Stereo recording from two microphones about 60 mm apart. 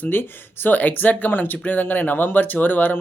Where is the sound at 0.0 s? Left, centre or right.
Left.